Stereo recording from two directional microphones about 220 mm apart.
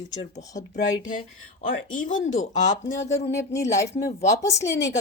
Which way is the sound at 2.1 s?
35° left (ahead or behind).